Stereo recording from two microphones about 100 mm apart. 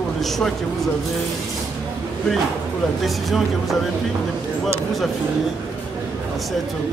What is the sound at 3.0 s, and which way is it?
Speech, centre (ahead or behind).